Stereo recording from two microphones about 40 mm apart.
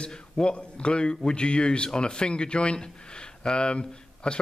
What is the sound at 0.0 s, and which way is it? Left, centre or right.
A man's voice, left.